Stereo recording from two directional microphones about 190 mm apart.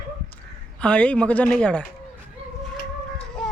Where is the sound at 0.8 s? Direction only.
5° left (ahead or behind).